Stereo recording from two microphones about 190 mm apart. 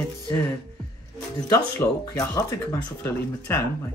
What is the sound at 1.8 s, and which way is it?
Speech, 10° left (ahead or behind).